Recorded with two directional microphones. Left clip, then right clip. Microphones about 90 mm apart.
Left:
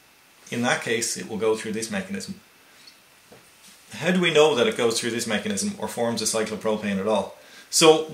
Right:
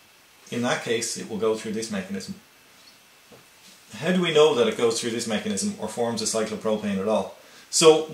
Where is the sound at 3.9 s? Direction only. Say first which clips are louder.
Left 2 dB; 20° left (ahead or behind).